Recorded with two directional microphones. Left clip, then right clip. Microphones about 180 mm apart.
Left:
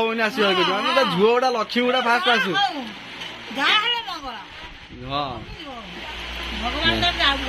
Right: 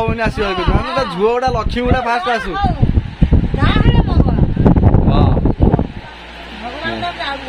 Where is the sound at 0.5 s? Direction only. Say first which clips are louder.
Right 1 dB; 55° right (ahead or behind).